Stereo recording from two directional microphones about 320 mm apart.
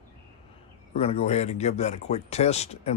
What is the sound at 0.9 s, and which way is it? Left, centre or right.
Speech, centre.